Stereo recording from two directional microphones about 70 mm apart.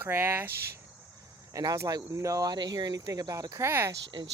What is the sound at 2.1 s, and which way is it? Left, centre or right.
Speech, right.